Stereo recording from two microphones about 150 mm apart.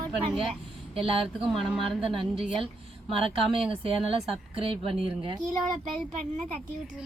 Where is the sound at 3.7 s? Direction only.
40° right (ahead or behind).